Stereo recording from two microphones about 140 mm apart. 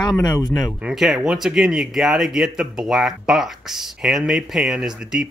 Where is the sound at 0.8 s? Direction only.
Centre (ahead or behind).